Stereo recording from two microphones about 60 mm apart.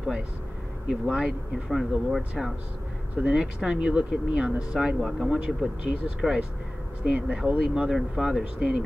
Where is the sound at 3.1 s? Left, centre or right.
Right.